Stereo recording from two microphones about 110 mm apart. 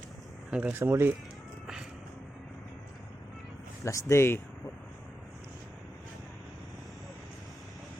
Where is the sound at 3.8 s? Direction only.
25° left (ahead or behind).